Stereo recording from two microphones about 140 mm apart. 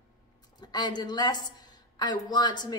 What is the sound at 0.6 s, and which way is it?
A woman's voice, 30° left (ahead or behind).